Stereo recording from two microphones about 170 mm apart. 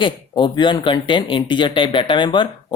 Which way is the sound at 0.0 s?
25° left (ahead or behind).